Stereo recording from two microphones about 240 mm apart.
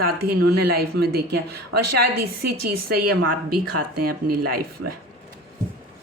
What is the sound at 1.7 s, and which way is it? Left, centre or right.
A woman's voice, right.